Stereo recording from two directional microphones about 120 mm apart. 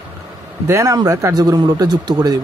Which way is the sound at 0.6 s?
25° right (ahead or behind).